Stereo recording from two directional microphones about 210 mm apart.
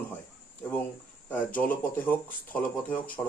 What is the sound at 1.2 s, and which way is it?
Speech, 10° left (ahead or behind).